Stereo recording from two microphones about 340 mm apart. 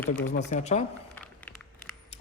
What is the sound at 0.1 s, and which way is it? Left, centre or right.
Speech, left.